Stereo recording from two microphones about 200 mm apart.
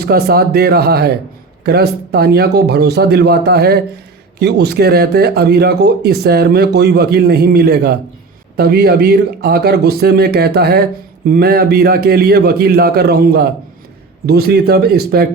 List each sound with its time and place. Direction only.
0.0 s speech: 50° right (ahead or behind)